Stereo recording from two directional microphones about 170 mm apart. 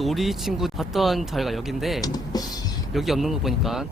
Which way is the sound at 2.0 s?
20° left (ahead or behind).